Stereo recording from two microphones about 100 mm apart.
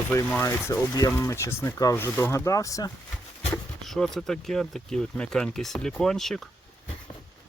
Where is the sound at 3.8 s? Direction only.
Centre (ahead or behind).